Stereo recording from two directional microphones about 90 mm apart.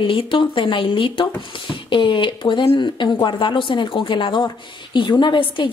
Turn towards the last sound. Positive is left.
turn(degrees=60)  # may be behind; listen again after turning